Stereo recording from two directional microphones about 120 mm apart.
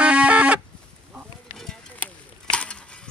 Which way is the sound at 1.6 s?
10° left (ahead or behind).